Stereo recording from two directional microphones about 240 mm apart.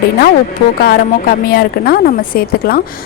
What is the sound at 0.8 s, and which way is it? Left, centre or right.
Speech, left.